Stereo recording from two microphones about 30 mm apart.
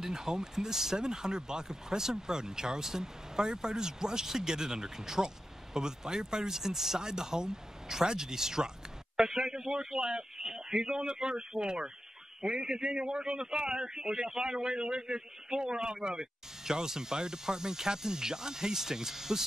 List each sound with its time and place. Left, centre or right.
0.0 s speech: right